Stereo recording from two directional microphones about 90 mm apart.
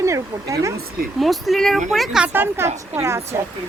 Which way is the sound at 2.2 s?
20° right (ahead or behind).